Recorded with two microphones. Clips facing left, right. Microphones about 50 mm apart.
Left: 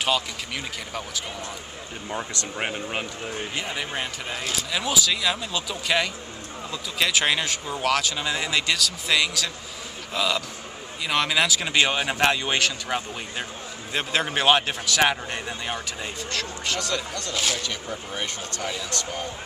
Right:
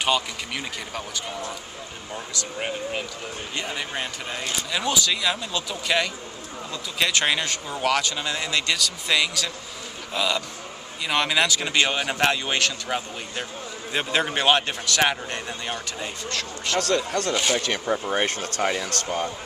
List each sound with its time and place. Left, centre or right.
0.0 s speech: centre
2.1 s speech: left
3.5 s speech: centre
16.7 s speech: right
17.3 s speech: centre
17.6 s speech: right